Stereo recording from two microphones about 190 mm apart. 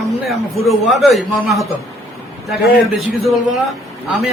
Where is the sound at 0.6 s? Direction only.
Centre (ahead or behind).